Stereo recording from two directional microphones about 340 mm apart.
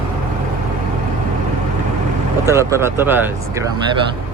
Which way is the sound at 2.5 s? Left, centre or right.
Centre.